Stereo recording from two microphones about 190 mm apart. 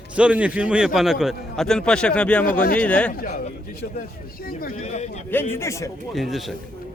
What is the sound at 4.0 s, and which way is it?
Speech, 50° left (ahead or behind).